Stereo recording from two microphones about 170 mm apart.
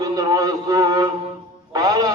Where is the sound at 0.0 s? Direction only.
20° right (ahead or behind).